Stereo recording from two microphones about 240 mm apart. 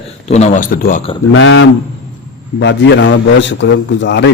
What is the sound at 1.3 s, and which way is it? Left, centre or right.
A man's voice, left.